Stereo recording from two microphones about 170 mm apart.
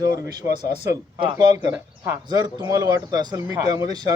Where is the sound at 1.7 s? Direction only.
20° right (ahead or behind).